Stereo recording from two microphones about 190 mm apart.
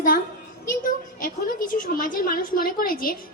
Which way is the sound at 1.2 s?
45° left (ahead or behind).